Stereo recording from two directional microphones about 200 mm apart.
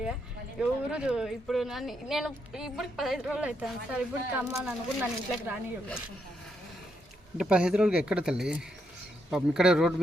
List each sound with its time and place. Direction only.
0.6 s speech: 5° right (ahead or behind)
7.3 s speech: 5° right (ahead or behind)